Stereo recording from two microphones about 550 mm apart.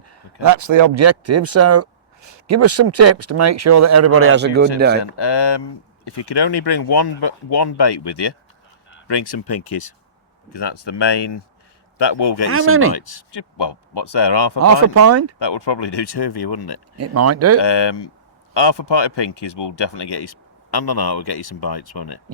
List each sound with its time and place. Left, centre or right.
0.4 s speech: right; by 5.0 s centre
5.0 s speech: left
12.5 s speech: right
12.9 s speech: left
14.6 s speech: right
15.4 s speech: left
17.0 s speech: right
17.6 s speech: left